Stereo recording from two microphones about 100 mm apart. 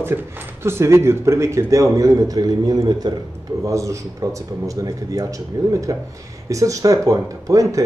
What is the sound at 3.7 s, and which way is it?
Speech, 30° right (ahead or behind).